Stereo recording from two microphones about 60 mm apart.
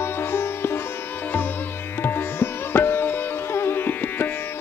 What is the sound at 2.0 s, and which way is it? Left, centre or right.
Sitar, left.